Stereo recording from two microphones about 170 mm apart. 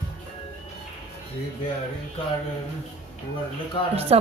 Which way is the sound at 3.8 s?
30° left (ahead or behind).